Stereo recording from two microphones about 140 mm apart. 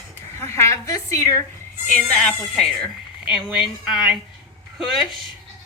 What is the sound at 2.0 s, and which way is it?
Speech, 5° left (ahead or behind).